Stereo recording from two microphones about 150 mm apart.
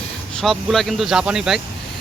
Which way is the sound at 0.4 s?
Centre (ahead or behind).